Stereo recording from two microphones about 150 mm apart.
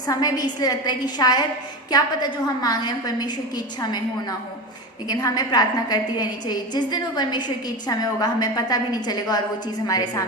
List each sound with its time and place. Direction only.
0.1 s a woman's voice: 25° left (ahead or behind)